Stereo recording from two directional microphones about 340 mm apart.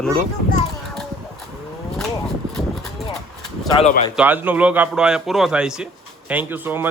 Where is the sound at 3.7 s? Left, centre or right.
Centre.